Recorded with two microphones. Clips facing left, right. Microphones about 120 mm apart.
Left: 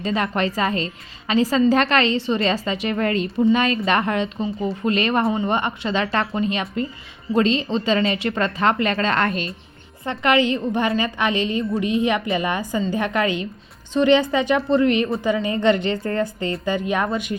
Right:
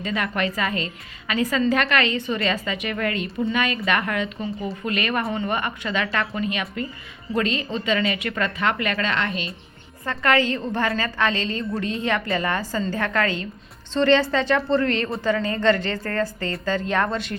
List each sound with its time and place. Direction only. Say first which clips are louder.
0.0 s a woman's voice: left 3 dB; 30° left (ahead or behind)
9.1 s a woman's voice: left 4 dB; 45° left (ahead or behind)
10.0 s a woman's voice: left 2 dB; 20° left (ahead or behind)